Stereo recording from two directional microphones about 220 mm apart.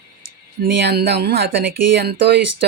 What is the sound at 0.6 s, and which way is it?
Speech, 45° right (ahead or behind).